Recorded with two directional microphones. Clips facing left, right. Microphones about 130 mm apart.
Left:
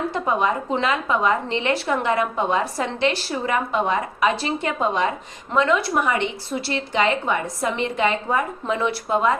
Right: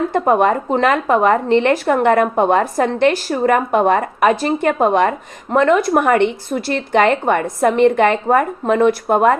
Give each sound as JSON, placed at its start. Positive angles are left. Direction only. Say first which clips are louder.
{"t": 0.1, "sound": "a woman's voice", "louder": "right 8 dB", "side_deg": -55}